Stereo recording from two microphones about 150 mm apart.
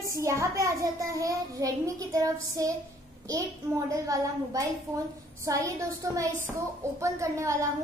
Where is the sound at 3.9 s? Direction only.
20° right (ahead or behind).